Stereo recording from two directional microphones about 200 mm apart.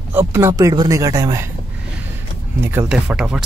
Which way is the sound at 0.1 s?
10° right (ahead or behind).